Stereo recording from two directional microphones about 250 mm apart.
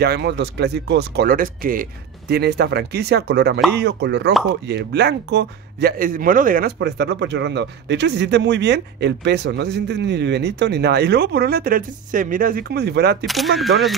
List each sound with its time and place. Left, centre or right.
0.0 s speech: right
13.2 s speech: centre